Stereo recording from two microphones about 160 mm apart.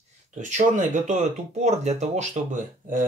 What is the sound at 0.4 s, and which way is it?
Speech, 50° right (ahead or behind).